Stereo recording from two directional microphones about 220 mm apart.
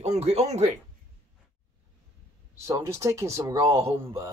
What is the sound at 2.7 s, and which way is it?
Speech, 15° right (ahead or behind).